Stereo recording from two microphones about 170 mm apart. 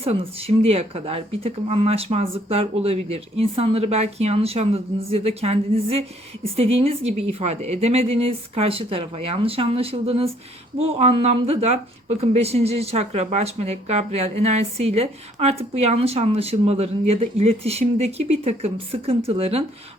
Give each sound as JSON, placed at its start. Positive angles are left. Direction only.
{"t": 0.0, "sound": "speech", "side_deg": -35}